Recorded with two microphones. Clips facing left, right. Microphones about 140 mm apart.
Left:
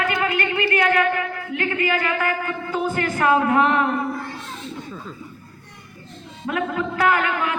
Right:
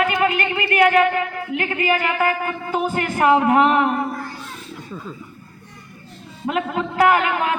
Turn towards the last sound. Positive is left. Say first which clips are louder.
# right 3 dB
turn(degrees=-20)  # may be behind; listen again after turning